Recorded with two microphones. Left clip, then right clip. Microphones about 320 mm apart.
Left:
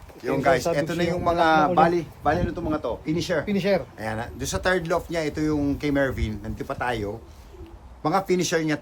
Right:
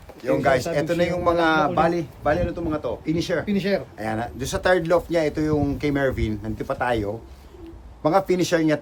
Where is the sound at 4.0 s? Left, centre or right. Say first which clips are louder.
Right 3 dB; centre.